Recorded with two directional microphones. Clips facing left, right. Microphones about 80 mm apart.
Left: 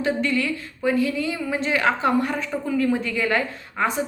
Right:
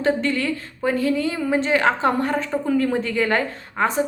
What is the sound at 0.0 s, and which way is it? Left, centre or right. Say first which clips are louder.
A woman's voice: right 2 dB; right.